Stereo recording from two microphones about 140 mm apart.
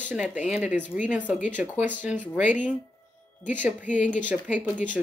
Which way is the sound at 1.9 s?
65° left (ahead or behind).